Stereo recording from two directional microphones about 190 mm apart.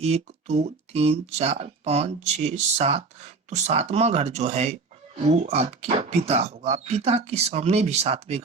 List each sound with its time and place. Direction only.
0.0 s speech: 35° right (ahead or behind)